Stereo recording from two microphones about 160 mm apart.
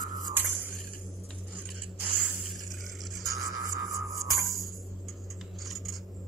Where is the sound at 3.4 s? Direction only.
20° right (ahead or behind).